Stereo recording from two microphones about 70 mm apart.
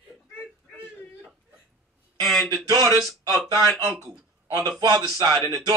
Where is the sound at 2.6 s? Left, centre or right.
Right.